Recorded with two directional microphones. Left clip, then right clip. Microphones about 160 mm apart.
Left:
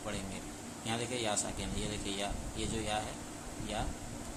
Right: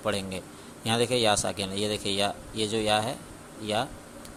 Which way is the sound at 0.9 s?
50° right (ahead or behind).